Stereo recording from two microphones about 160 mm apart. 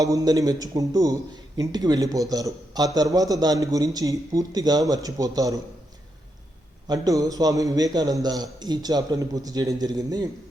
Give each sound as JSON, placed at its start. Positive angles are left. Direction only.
{"t": 0.0, "sound": "a man's voice", "side_deg": -20}
{"t": 6.8, "sound": "a man's voice", "side_deg": -25}